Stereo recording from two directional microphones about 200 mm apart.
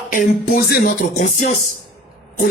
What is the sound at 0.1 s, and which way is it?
Speech, 40° left (ahead or behind).